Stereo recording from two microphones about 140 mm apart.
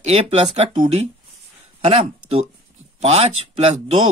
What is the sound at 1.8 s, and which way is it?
Speech, 45° right (ahead or behind).